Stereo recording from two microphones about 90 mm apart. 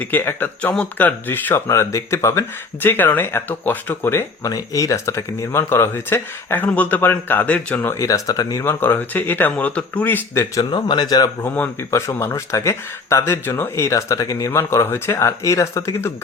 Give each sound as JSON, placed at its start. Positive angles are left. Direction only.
{"t": 0.0, "sound": "speech", "side_deg": 20}
{"t": 4.4, "sound": "speech", "side_deg": 40}
{"t": 7.9, "sound": "speech", "side_deg": 40}
{"t": 8.6, "sound": "speech", "side_deg": 25}
{"t": 10.7, "sound": "speech", "side_deg": 55}
{"t": 11.9, "sound": "speech", "side_deg": 30}